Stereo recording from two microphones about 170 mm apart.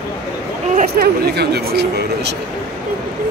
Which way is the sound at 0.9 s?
70° right (ahead or behind).